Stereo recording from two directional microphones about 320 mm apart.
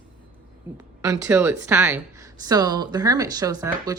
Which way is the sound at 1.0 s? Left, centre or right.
Centre.